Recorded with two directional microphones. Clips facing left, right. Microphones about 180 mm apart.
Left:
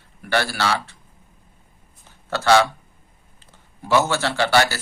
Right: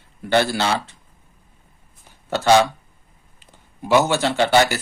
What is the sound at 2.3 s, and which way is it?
Speech, 15° right (ahead or behind).